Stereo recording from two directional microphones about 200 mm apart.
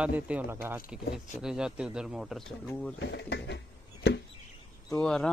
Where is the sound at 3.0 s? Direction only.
60° left (ahead or behind).